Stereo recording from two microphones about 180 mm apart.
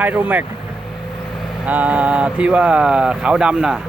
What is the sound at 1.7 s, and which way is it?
Speech, 10° right (ahead or behind).